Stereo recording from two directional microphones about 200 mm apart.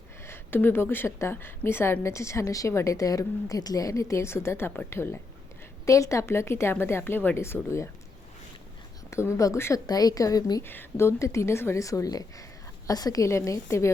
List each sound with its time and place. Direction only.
0.3 s a woman's voice: 10° left (ahead or behind)
9.0 s a woman's voice: 15° left (ahead or behind)